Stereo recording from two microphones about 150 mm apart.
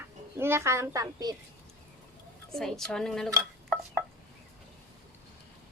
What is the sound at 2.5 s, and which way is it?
Speech, 5° left (ahead or behind).